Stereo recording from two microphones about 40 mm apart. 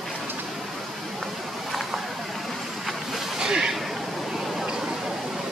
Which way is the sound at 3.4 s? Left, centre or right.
Centre.